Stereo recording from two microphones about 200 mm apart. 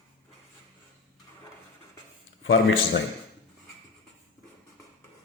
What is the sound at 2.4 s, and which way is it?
Mantra, 70° left (ahead or behind).